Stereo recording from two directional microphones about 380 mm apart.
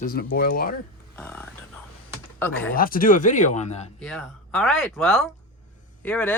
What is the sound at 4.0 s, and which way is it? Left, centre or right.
Speech, centre.